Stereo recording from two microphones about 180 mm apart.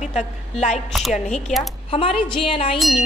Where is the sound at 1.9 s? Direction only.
30° left (ahead or behind).